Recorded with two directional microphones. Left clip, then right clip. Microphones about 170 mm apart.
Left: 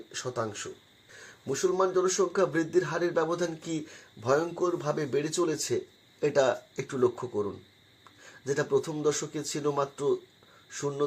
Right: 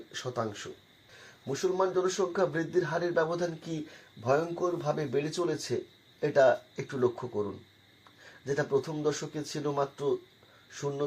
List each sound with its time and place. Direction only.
0.1 s speech: 10° left (ahead or behind)
1.5 s a man's voice: 30° left (ahead or behind)
8.4 s a man's voice: 25° left (ahead or behind)